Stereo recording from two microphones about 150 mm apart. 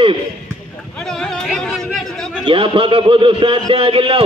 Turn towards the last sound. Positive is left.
turn(degrees=-40)  # may be behind; listen again after turning